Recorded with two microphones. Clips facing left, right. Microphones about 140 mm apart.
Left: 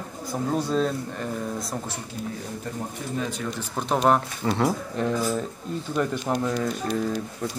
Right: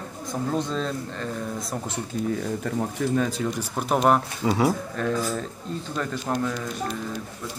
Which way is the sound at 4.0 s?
5° right (ahead or behind).